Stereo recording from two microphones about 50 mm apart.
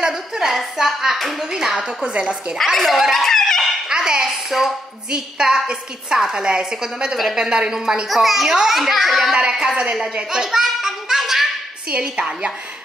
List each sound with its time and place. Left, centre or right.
0.0 s a woman's voice: centre
2.5 s speech: centre
3.9 s a woman's voice: centre
8.1 s a child's voice: centre
9.5 s a woman's voice: centre
10.1 s a sound: centre
11.9 s a woman's voice: centre